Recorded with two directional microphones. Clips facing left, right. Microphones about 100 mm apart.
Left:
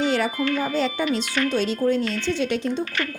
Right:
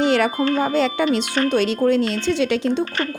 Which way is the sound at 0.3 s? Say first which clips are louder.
Right 4 dB; 35° right (ahead or behind).